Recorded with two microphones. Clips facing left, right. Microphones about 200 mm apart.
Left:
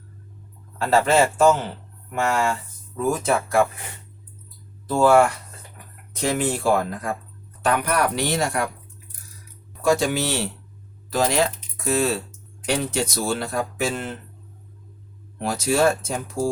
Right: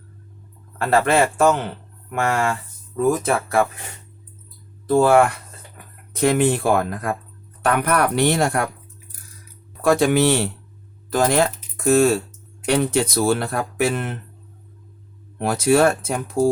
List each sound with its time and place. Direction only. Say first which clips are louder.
0.8 s speech: right 1 dB; 55° right (ahead or behind)
4.9 s speech: right 2 dB; 55° right (ahead or behind)
9.8 s speech: right 5 dB; 60° right (ahead or behind)
15.4 s speech: right 4 dB; 60° right (ahead or behind)